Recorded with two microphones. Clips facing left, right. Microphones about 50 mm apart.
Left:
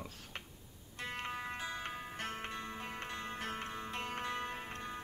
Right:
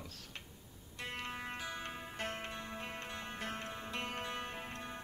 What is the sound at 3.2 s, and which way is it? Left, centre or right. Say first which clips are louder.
Music: left 2 dB; right.